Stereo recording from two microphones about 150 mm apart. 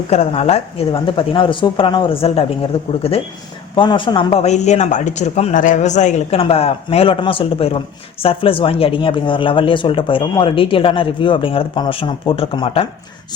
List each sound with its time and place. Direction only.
0.1 s speech: 45° left (ahead or behind)
1.0 s speech: 35° left (ahead or behind)